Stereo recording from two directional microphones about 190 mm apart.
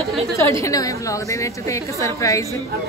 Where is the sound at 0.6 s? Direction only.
20° left (ahead or behind).